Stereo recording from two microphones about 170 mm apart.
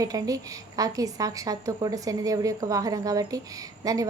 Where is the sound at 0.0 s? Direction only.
20° right (ahead or behind).